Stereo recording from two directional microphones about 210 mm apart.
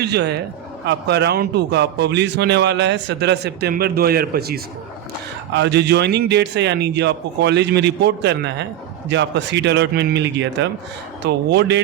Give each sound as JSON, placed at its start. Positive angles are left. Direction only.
{"t": 0.0, "sound": "a man's voice", "side_deg": -50}